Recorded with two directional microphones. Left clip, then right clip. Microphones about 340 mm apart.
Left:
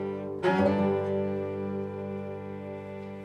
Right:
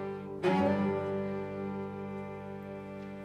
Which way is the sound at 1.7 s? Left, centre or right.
Left.